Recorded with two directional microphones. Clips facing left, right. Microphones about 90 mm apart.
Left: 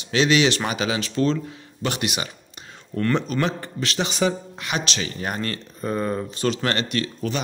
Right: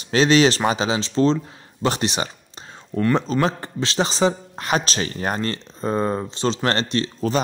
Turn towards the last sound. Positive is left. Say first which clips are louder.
# right 4 dB
turn(degrees=-30)  # may be behind; listen again after turning